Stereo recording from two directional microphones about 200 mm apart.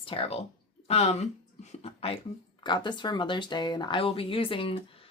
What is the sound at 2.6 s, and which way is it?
Speech, 20° left (ahead or behind).